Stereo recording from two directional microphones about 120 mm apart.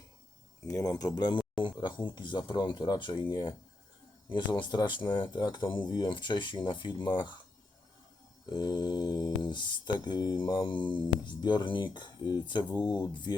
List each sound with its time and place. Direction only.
0.6 s speech: 25° left (ahead or behind)
8.4 s speech: 35° left (ahead or behind)